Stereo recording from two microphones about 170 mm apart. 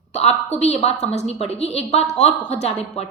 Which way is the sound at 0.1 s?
40° left (ahead or behind).